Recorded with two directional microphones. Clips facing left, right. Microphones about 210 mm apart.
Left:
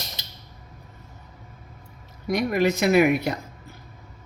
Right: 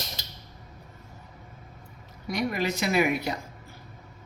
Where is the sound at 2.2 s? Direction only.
50° left (ahead or behind).